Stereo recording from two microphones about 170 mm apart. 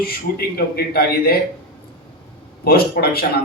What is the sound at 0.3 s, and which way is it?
Speech, 70° left (ahead or behind).